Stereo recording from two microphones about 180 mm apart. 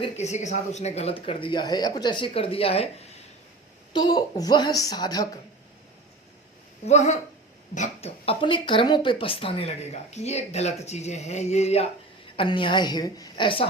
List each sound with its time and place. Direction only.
0.0 s a woman's voice: 40° left (ahead or behind); by 5.4 s 20° left (ahead or behind)
6.8 s a woman's voice: 40° left (ahead or behind)